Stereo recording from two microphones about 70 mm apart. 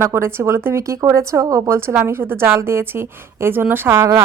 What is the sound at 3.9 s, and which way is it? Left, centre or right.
Speech, right.